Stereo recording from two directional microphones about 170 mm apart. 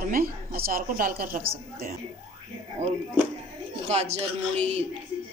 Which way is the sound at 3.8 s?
40° right (ahead or behind).